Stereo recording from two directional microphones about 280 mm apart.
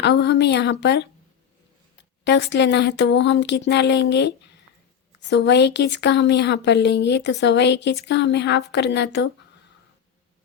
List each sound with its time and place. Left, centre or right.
0.0 s speech: left
2.2 s speech: left